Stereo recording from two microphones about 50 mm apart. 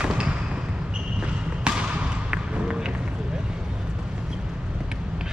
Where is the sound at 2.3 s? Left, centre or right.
Centre.